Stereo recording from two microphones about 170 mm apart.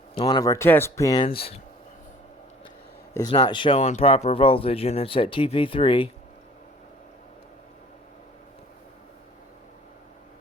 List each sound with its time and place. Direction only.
0.1 s speech: 25° left (ahead or behind)
3.2 s speech: 25° left (ahead or behind)